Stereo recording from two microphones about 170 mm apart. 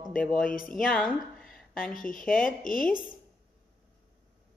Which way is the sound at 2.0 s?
55° left (ahead or behind).